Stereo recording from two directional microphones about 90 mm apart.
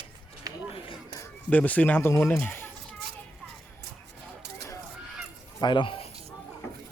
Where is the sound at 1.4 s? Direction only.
15° left (ahead or behind).